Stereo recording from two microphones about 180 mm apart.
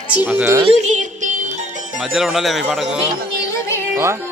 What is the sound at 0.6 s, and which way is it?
Music, 40° right (ahead or behind).